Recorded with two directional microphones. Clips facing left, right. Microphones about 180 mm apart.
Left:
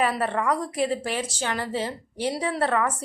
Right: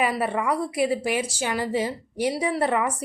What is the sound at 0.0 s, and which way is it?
A woman's voice, 10° right (ahead or behind).